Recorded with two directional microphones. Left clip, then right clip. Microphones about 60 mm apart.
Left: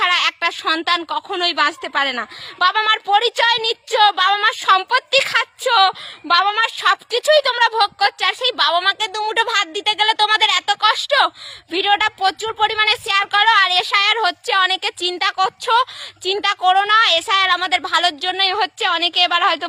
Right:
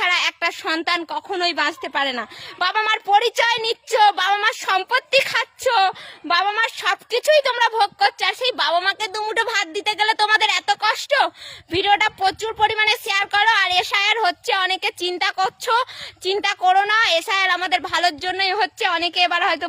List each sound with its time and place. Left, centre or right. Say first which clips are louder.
0.0 s a woman's voice: left 3 dB; right
6.7 s speech: left 4 dB; right
11.7 s speech: left 1 dB; right